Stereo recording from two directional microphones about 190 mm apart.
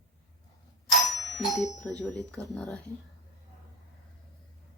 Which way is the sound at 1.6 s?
15° left (ahead or behind).